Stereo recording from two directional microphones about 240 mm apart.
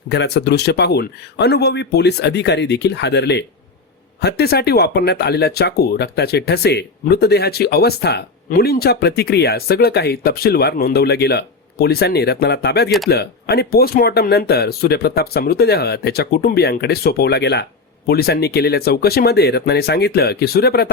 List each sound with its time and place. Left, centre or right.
0.1 s speech: left